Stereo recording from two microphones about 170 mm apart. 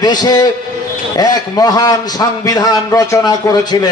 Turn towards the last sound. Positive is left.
turn(degrees=20)  # may be behind; listen again after turning